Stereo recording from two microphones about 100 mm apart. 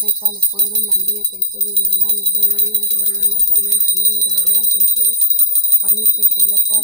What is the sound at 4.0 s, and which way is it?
Speech, centre (ahead or behind).